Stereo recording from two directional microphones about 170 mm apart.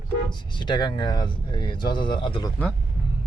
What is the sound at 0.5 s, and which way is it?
Speech, 25° left (ahead or behind).